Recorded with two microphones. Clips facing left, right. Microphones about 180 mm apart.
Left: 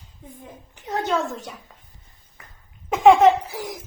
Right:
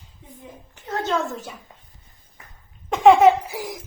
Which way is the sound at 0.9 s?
15° left (ahead or behind).